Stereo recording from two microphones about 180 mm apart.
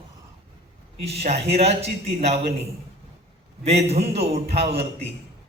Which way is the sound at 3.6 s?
35° right (ahead or behind).